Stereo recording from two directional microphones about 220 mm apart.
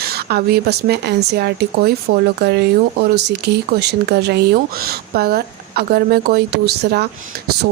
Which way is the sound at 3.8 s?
50° right (ahead or behind).